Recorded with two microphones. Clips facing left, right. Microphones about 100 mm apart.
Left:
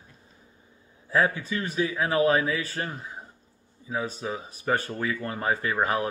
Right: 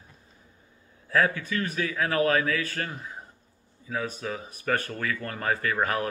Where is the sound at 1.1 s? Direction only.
20° left (ahead or behind).